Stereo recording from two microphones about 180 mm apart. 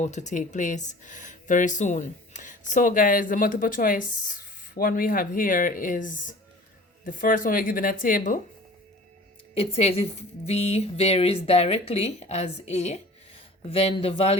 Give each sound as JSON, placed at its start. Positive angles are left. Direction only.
{"t": 0.0, "sound": "speech", "side_deg": 40}
{"t": 9.6, "sound": "a woman's voice", "side_deg": 35}